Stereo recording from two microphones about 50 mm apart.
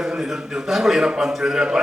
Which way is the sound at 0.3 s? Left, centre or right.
Centre.